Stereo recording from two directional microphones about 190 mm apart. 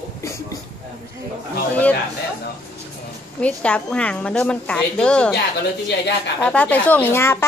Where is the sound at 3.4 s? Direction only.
5° left (ahead or behind).